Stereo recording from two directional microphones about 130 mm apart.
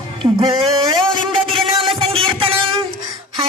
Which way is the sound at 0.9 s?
35° right (ahead or behind).